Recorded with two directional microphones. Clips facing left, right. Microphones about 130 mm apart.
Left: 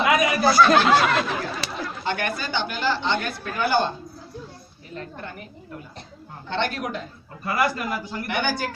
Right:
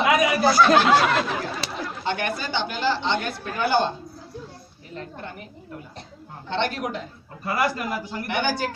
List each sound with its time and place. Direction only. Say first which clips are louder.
0.0 s speech: even; 25° right (ahead or behind)
4.9 s a man's voice: even; 25° right (ahead or behind)
6.5 s a man's voice: right 1 dB; 25° right (ahead or behind)